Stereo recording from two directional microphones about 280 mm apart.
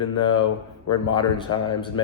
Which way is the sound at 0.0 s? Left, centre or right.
Centre.